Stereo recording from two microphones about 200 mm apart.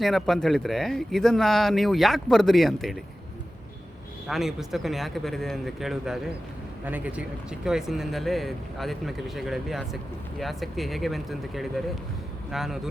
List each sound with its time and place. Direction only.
0.0 s speech: centre (ahead or behind)
4.3 s speech: centre (ahead or behind)